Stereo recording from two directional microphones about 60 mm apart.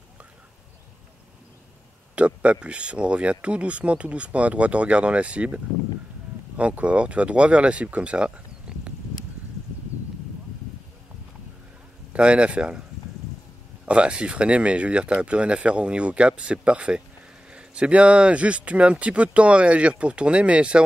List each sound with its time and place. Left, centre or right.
2.1 s speech: centre
12.1 s speech: centre
13.8 s speech: centre